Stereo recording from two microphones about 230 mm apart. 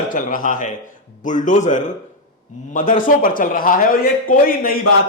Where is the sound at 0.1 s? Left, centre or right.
Left.